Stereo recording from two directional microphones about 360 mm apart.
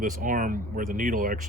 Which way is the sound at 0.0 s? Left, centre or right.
Right.